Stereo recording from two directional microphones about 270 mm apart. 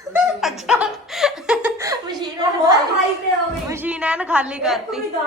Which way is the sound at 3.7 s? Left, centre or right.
Centre.